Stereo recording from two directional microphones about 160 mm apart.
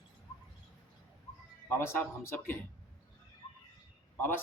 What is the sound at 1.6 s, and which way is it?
Speech, 15° left (ahead or behind).